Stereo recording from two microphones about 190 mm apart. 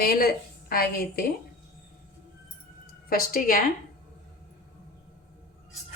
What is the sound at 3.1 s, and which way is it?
Speech, 50° left (ahead or behind).